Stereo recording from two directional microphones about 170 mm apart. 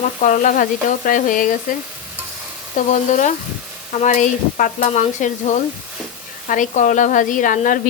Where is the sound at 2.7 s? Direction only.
45° left (ahead or behind).